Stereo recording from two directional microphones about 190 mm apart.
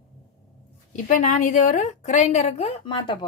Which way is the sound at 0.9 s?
40° left (ahead or behind).